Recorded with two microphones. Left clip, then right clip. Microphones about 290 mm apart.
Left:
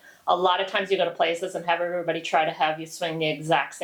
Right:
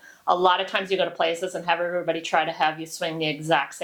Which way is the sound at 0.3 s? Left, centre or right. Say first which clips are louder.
Right 2 dB; right.